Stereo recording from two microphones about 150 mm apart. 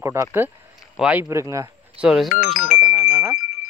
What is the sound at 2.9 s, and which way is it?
Wind chime, 20° right (ahead or behind).